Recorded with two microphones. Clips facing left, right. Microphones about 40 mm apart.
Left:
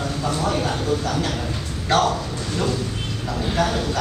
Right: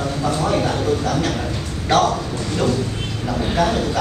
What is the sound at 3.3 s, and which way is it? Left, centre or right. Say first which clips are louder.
Mantra: right 3 dB; centre.